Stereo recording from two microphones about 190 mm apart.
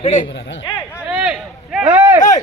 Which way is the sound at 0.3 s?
70° left (ahead or behind).